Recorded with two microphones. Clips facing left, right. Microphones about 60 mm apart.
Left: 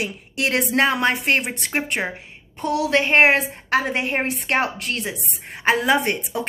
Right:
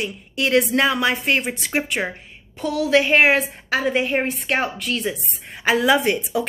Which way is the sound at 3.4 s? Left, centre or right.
Left.